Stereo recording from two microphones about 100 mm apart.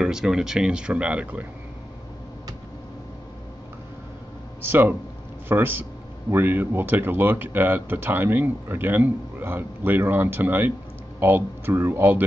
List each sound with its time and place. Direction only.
0.0 s speech: 5° right (ahead or behind)
4.6 s speech: 20° right (ahead or behind)